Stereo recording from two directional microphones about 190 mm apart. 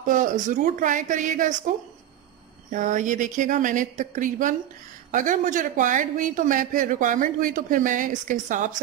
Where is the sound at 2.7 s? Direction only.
40° right (ahead or behind).